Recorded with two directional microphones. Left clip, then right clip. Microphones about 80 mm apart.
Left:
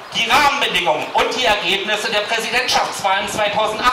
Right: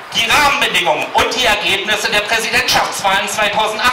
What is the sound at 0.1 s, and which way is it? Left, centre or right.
A man's voice, right.